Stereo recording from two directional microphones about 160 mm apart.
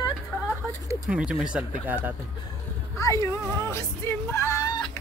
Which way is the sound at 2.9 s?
20° left (ahead or behind).